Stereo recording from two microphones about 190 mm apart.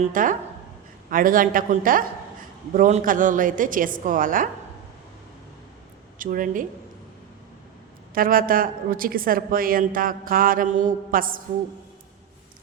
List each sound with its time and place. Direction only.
0.0 s a woman's voice: 45° right (ahead or behind)
6.1 s a woman's voice: 45° right (ahead or behind)
8.1 s a woman's voice: 50° right (ahead or behind)